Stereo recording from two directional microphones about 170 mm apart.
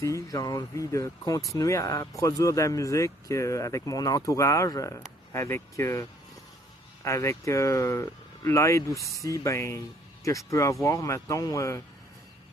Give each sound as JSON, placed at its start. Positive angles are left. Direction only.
{"t": 0.0, "sound": "speech", "side_deg": 20}